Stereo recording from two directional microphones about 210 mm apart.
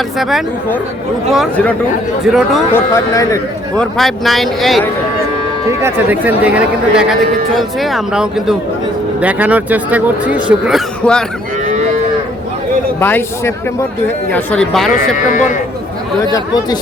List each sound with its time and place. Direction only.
0.2 s speech: centre (ahead or behind)
2.7 s a man's voice: 15° left (ahead or behind)
3.8 s speech: centre (ahead or behind)
13.0 s a man's voice: 10° left (ahead or behind)
14.9 s a man's voice: 35° left (ahead or behind)